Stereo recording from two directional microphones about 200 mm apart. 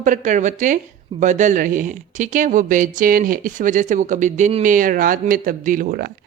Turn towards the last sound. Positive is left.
turn(degrees=-45)  # may be behind; listen again after turning